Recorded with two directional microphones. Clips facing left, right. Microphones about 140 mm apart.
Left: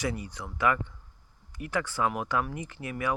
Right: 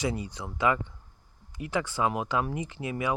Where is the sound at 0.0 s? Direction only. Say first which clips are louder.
Right 2 dB; 20° right (ahead or behind).